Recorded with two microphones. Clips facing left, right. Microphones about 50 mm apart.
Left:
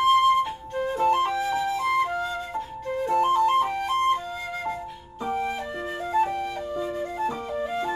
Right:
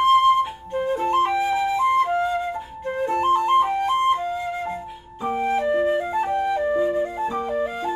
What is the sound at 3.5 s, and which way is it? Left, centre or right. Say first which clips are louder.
Flute: right 4 dB; centre.